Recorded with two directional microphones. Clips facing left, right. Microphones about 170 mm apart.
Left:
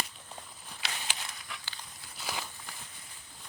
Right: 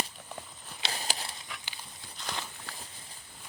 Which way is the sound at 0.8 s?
35° right (ahead or behind).